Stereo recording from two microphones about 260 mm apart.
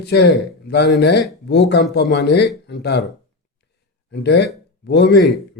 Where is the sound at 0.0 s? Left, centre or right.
Left.